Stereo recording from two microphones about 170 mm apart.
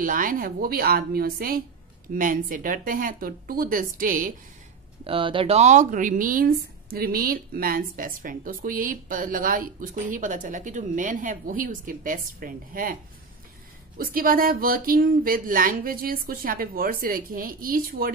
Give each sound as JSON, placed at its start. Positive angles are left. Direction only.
{"t": 0.0, "sound": "speech", "side_deg": -55}
{"t": 5.0, "sound": "speech", "side_deg": -30}
{"t": 13.9, "sound": "speech", "side_deg": -55}